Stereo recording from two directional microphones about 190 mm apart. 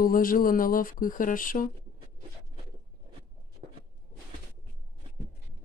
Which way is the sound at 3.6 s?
35° right (ahead or behind).